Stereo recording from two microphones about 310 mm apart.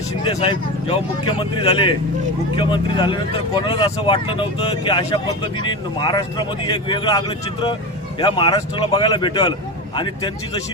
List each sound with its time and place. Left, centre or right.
0.3 s speech: centre
8.2 s speech: centre